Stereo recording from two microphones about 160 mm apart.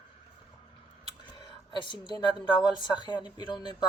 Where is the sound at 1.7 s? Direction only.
30° left (ahead or behind).